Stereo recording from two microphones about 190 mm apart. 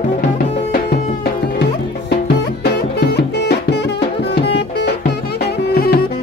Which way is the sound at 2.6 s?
60° left (ahead or behind).